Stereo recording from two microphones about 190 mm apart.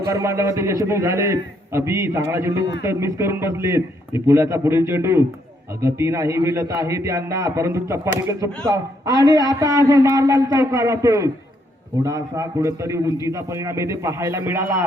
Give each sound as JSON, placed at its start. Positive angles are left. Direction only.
{"t": 0.1, "sound": "a man's voice", "side_deg": -15}